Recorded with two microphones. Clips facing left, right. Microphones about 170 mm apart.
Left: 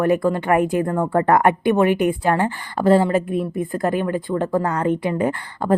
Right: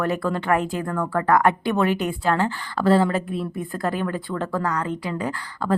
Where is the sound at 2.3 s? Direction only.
15° left (ahead or behind).